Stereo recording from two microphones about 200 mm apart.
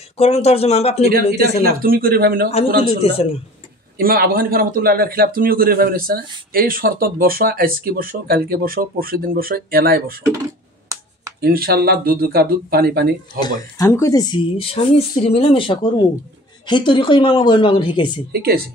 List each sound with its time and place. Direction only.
0.2 s speech: 30° left (ahead or behind)
1.6 s a man's voice: 45° right (ahead or behind)
3.0 s speech: 30° left (ahead or behind)
4.0 s a man's voice: 50° right (ahead or behind)
11.4 s a man's voice: 50° right (ahead or behind)
13.4 s speech: 20° left (ahead or behind)
18.3 s a man's voice: 50° right (ahead or behind)